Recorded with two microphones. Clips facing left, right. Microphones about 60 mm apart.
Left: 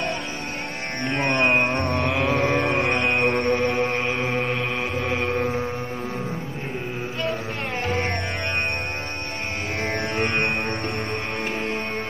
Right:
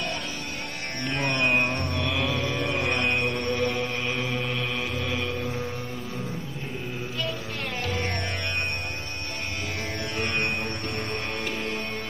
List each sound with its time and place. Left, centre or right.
1.0 s music: left
2.0 s a sound: left
3.1 s mantra: left
7.8 s music: left
10.1 s music: left